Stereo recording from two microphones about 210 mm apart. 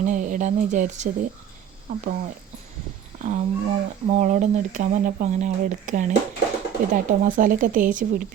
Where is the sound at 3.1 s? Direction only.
30° right (ahead or behind).